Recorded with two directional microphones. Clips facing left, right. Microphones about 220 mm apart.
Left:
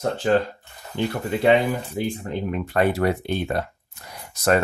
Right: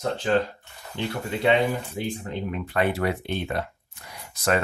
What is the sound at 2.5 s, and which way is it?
Speech, 45° left (ahead or behind).